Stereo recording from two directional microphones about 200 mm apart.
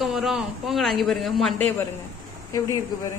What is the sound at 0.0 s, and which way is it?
Speech, centre (ahead or behind).